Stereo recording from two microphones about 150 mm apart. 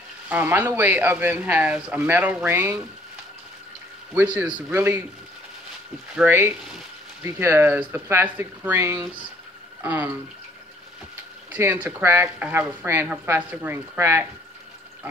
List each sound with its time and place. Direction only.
0.3 s speech: 15° right (ahead or behind)
4.1 s speech: 10° right (ahead or behind)
6.1 s speech: 15° right (ahead or behind)
11.5 s speech: 10° right (ahead or behind)